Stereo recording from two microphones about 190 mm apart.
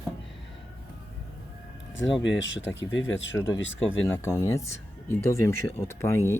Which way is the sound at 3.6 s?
80° left.